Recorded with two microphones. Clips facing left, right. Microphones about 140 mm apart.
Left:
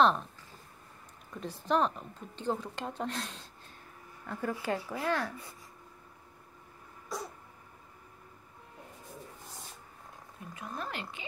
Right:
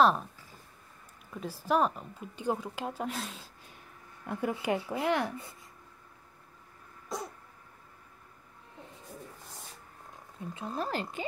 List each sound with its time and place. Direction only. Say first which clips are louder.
1.3 s a woman's voice: right 1 dB; 5° right (ahead or behind)
4.3 s speech: right 3 dB; 15° right (ahead or behind)
10.4 s speech: right 5 dB; 30° right (ahead or behind)